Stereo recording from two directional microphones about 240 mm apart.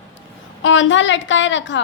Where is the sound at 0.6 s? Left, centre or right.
Left.